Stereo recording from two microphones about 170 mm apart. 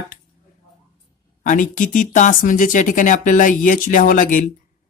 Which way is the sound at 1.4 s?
50° left (ahead or behind).